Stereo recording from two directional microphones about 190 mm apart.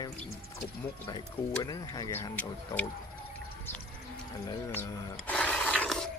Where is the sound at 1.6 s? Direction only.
20° left (ahead or behind).